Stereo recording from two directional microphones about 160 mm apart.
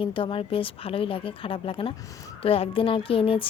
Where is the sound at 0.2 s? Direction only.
35° left (ahead or behind).